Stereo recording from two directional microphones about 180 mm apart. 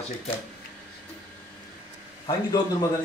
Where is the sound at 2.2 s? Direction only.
20° left (ahead or behind).